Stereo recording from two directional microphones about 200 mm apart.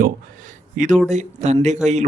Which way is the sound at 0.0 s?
40° right (ahead or behind).